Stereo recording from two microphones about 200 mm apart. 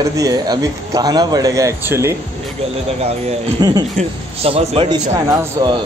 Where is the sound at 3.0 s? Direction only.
30° right (ahead or behind).